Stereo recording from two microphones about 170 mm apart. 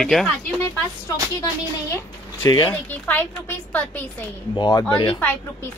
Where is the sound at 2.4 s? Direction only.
25° left (ahead or behind).